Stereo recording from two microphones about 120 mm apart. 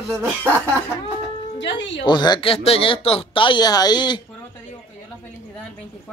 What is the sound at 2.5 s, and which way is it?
Speech, 55° left (ahead or behind).